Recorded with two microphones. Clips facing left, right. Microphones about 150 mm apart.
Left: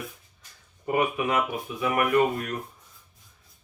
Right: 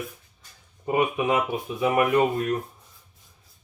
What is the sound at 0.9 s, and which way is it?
Speech, 20° right (ahead or behind).